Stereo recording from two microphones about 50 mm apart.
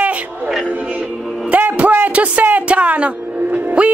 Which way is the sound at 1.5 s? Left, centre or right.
Right.